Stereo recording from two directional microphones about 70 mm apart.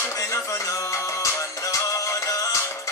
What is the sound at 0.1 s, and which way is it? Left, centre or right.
Music, left.